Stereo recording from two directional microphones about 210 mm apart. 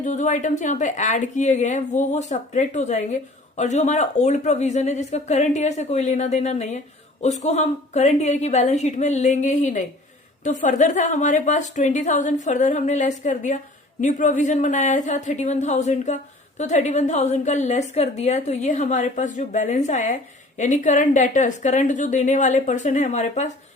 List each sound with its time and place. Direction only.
0.0 s a woman's voice: 35° left (ahead or behind)